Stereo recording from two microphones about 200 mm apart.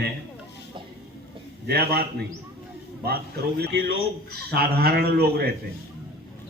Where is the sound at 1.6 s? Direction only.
55° right (ahead or behind).